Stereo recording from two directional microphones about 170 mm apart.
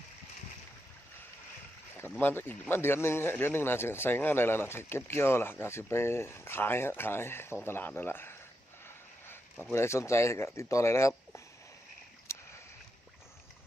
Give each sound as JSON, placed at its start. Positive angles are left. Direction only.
{"t": 2.0, "sound": "speech", "side_deg": 10}
{"t": 9.7, "sound": "speech", "side_deg": 15}
{"t": 12.3, "sound": "boat", "side_deg": 15}